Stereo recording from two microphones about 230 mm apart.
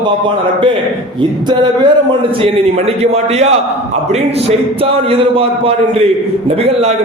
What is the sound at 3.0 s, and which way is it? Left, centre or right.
Speech, right.